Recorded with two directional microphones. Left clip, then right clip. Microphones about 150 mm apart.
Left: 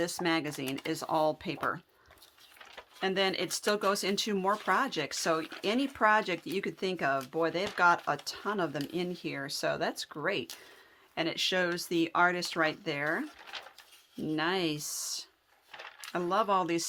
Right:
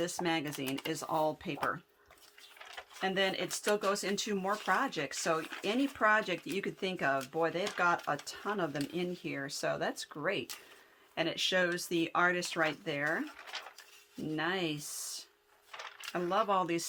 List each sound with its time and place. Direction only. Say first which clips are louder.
0.0 s speech: left 3 dB; 30° left (ahead or behind)
3.0 s speech: left 2 dB; 35° left (ahead or behind)
14.3 s speech: left 3 dB; 35° left (ahead or behind)